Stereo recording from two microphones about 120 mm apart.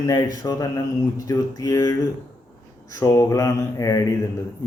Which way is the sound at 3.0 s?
25° left (ahead or behind).